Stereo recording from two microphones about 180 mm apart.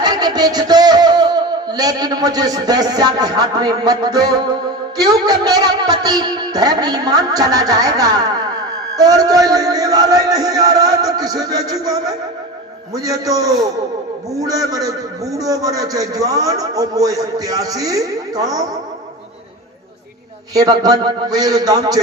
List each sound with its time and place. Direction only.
0.0 s a man's voice: 20° right (ahead or behind)
20.5 s a man's voice: 20° right (ahead or behind)